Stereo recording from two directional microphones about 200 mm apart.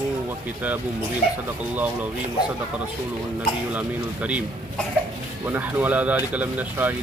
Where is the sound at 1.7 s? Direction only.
10° right (ahead or behind).